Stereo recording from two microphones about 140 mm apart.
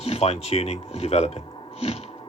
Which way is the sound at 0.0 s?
50° left (ahead or behind).